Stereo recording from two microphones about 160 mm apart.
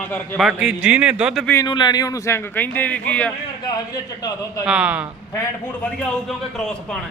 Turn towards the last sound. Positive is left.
turn(degrees=5)  # may be behind; listen again after turning